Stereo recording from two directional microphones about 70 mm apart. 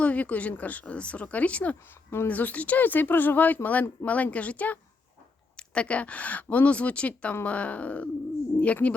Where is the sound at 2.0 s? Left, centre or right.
Left.